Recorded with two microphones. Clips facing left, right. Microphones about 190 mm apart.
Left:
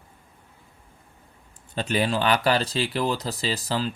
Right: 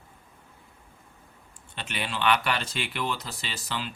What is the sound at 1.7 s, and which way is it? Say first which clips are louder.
Speech: left 10 dB; 40° left (ahead or behind).